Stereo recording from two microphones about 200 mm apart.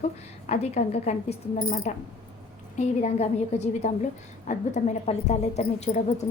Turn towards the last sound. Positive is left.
turn(degrees=35)  # may be behind; listen again after turning